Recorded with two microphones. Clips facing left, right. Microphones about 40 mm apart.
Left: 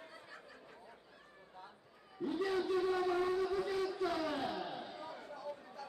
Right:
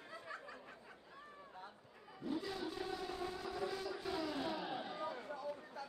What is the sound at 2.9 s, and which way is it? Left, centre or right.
Civil defense siren, left.